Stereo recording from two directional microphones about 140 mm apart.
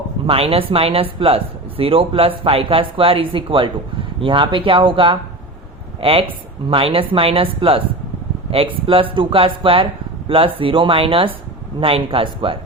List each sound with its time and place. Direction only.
0.3 s speech: 45° right (ahead or behind)